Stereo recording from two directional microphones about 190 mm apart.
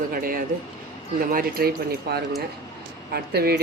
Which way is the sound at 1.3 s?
50° right (ahead or behind).